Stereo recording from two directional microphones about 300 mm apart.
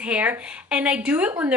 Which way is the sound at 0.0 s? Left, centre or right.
Centre.